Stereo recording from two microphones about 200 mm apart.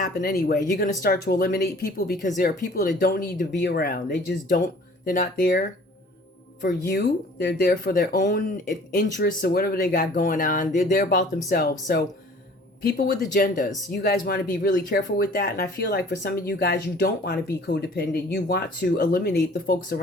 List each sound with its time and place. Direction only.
0.0 s speech: 45° left (ahead or behind)